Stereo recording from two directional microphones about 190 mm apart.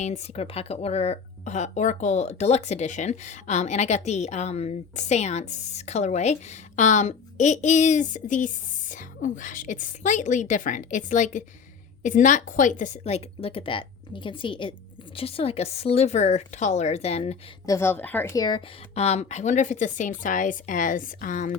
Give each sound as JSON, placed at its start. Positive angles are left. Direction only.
{"t": 0.0, "sound": "speech", "side_deg": 35}
{"t": 17.7, "sound": "speech", "side_deg": 15}
{"t": 18.9, "sound": "speech", "side_deg": 35}